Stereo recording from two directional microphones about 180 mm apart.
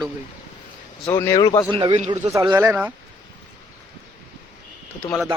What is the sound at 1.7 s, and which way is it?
Speech, 25° right (ahead or behind).